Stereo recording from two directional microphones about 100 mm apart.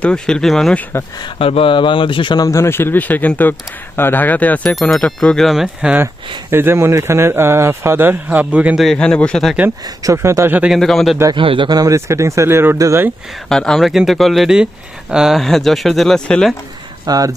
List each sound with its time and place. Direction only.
0.0 s speech: 5° left (ahead or behind)
1.4 s speech: 65° left (ahead or behind)
2.4 s speech: 30° left (ahead or behind); by 5.9 s 5° right (ahead or behind)
6.5 s speech: 25° right (ahead or behind)
8.8 s speech: 10° left (ahead or behind)
10.1 s speech: 25° right (ahead or behind)
10.7 s speech: centre (ahead or behind)
11.3 s a man's voice: 55° right (ahead or behind)
11.8 s speech: 30° right (ahead or behind)
13.5 s speech: 5° left (ahead or behind)
17.0 s speech: 40° right (ahead or behind)